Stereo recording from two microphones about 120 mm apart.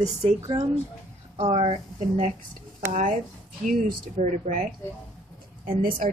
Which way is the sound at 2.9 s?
90° right.